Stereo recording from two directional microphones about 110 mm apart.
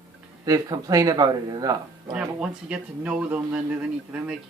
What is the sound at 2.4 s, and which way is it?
A man's voice, 10° right (ahead or behind).